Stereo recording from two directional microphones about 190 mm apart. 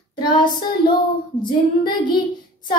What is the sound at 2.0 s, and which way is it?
Speech, 25° left (ahead or behind).